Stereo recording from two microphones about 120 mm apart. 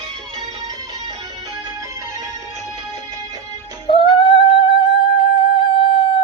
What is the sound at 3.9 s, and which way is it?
Singing, 45° left (ahead or behind).